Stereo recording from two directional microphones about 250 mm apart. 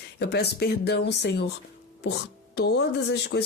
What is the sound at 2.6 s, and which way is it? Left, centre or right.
Speech, left.